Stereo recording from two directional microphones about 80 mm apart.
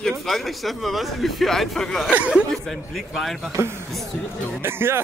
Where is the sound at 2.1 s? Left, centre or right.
Centre.